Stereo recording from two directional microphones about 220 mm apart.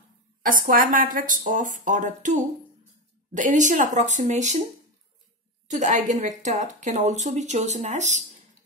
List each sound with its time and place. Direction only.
0.5 s speech: 40° right (ahead or behind)
5.7 s speech: 30° right (ahead or behind)